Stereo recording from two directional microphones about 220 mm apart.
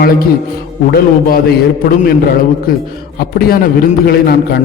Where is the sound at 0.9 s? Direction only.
45° left (ahead or behind).